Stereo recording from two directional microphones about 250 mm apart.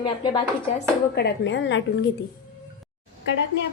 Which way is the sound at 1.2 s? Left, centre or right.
Left.